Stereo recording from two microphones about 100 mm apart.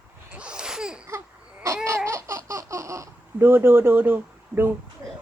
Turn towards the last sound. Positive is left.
turn(degrees=-20)  # may be behind; listen again after turning